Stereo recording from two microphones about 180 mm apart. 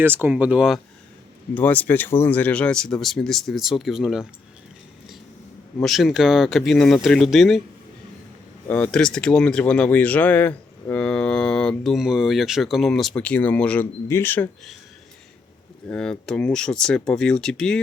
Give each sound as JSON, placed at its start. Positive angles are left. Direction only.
{"t": 0.0, "sound": "speech", "side_deg": -10}
{"t": 1.5, "sound": "speech", "side_deg": 10}
{"t": 5.8, "sound": "speech", "side_deg": 0}
{"t": 8.6, "sound": "speech", "side_deg": 10}
{"t": 15.9, "sound": "speech", "side_deg": 5}